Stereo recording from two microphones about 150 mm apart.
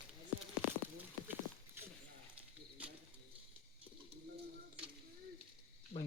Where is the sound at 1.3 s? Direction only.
15° right (ahead or behind).